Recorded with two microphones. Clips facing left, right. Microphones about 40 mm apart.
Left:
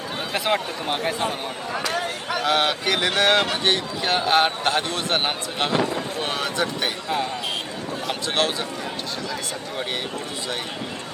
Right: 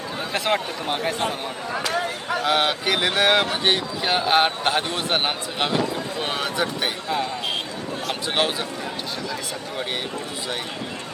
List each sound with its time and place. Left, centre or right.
0.3 s speech: centre
2.5 s speech: centre
8.4 s speech: centre